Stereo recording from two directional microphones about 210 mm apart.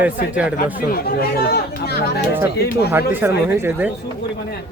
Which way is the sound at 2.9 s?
10° right (ahead or behind).